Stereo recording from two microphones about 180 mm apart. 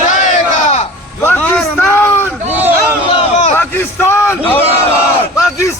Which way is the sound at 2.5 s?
10° right (ahead or behind).